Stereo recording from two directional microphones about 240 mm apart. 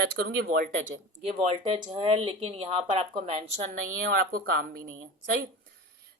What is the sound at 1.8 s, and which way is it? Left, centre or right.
Speech, centre.